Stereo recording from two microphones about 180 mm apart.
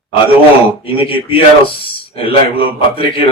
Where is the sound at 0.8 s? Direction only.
30° left (ahead or behind).